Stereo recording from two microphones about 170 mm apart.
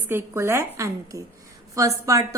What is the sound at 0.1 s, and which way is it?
A woman's voice, 15° right (ahead or behind).